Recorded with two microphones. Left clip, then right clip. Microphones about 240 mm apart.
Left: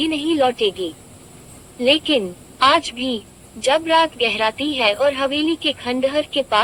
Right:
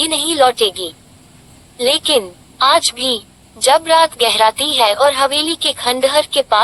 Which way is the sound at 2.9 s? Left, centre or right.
Right.